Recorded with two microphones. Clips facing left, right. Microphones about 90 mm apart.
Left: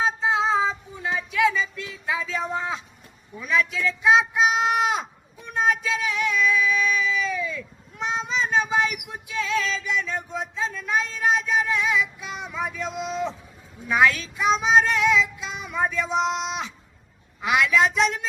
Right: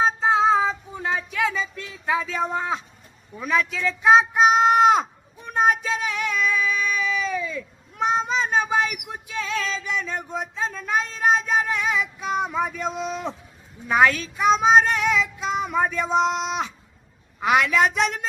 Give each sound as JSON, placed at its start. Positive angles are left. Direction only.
{"t": 0.0, "sound": "child singing", "side_deg": -40}
{"t": 3.4, "sound": "child singing", "side_deg": -40}
{"t": 5.5, "sound": "a sound", "side_deg": -40}
{"t": 7.9, "sound": "child singing", "side_deg": -45}
{"t": 13.8, "sound": "child singing", "side_deg": -40}